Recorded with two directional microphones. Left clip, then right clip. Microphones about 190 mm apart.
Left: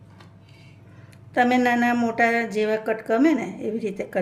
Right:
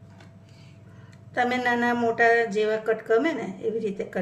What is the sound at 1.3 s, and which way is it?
Speech, 35° left (ahead or behind).